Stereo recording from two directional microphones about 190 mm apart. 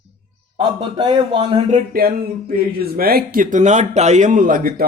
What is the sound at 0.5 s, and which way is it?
A man's voice, 25° right (ahead or behind).